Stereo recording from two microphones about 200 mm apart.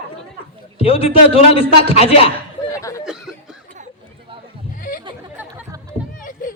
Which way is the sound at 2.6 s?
15° left (ahead or behind).